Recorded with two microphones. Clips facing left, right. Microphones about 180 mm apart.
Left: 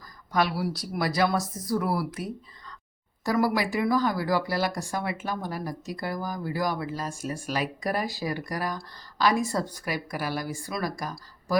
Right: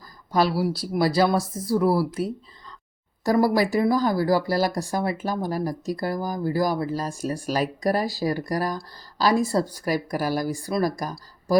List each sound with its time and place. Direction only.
0.3 s speech: 30° right (ahead or behind)